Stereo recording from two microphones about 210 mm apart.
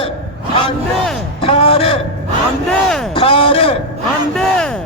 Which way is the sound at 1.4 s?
25° left (ahead or behind).